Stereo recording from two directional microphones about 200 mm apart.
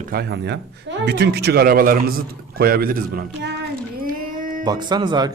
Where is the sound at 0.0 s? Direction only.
50° right (ahead or behind).